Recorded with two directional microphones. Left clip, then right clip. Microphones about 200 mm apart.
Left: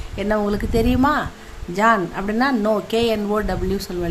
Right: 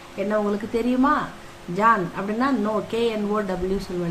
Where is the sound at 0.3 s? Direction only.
55° left (ahead or behind).